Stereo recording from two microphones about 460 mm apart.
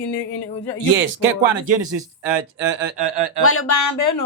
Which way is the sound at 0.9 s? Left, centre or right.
Right.